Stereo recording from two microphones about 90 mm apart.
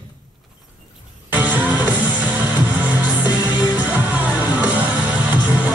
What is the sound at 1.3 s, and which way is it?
Music, 15° right (ahead or behind).